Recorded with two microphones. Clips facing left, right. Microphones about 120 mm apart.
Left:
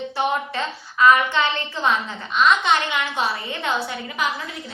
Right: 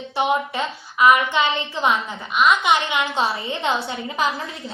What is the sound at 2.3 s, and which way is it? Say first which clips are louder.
Speech: right 1 dB; 5° right (ahead or behind).